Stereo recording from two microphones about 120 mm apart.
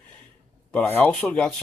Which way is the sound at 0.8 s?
15° left (ahead or behind).